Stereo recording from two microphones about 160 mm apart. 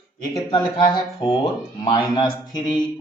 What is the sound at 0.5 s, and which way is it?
Speech, 30° left (ahead or behind).